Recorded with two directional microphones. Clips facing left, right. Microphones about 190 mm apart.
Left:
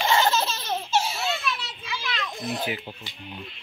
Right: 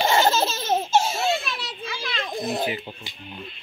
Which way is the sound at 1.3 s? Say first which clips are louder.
Right 1 dB; 30° right (ahead or behind).